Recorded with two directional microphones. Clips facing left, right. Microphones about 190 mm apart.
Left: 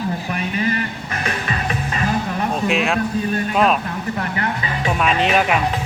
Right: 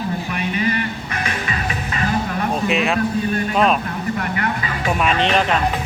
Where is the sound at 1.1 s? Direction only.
40° left (ahead or behind).